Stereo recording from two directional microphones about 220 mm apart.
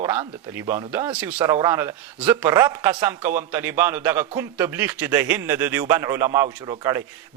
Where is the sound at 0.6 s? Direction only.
25° right (ahead or behind).